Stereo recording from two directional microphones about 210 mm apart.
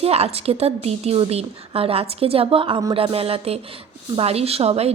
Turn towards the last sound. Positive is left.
turn(degrees=-30)  # may be behind; listen again after turning